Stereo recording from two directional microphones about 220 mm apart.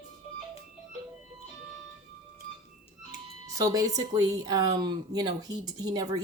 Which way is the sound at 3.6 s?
15° right (ahead or behind).